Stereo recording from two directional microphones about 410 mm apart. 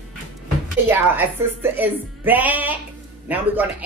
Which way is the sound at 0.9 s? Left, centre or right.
Centre.